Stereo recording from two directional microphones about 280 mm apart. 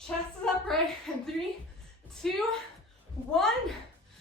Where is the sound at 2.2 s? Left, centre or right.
Centre.